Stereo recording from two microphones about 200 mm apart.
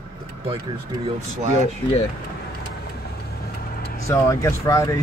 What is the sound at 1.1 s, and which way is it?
Speech, 35° right (ahead or behind).